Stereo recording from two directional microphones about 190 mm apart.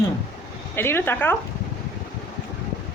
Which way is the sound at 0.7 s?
10° left (ahead or behind).